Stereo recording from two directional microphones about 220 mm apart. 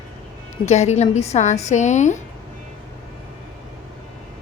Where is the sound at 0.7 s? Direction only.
30° left (ahead or behind).